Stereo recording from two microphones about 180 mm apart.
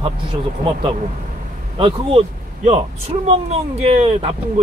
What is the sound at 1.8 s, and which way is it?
Speech, 30° right (ahead or behind).